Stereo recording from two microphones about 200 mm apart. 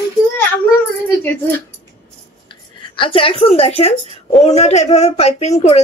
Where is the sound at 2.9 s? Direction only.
25° left (ahead or behind).